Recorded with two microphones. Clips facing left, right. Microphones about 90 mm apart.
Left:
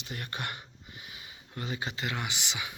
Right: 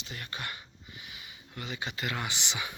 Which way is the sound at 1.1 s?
30° left (ahead or behind).